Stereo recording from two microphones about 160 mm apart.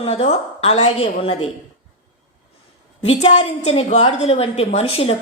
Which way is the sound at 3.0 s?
40° left (ahead or behind).